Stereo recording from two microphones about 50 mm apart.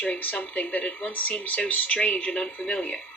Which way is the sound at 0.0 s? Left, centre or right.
Left.